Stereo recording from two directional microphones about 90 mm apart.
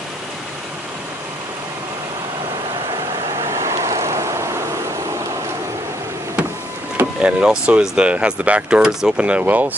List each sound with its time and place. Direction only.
3.4 s vehicle: 35° right (ahead or behind)
7.2 s speech: 10° right (ahead or behind)